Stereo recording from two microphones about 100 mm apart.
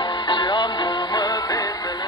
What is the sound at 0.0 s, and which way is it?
Music, 50° left (ahead or behind).